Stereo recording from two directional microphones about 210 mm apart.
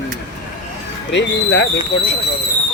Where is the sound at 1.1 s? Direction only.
55° left (ahead or behind).